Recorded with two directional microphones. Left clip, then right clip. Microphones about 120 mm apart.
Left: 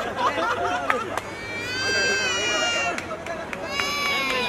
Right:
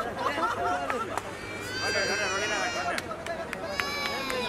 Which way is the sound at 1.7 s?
5° left (ahead or behind).